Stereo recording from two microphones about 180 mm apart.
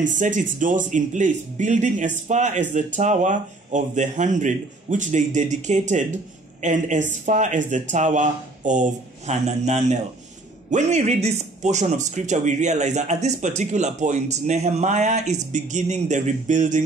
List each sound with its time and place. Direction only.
0.0 s a man's voice: 45° right (ahead or behind)